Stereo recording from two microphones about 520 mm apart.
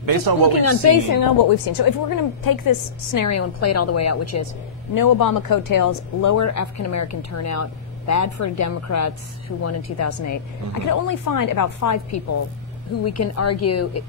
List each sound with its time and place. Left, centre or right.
0.0 s speech: right
0.5 s speech: left
4.9 s speech: left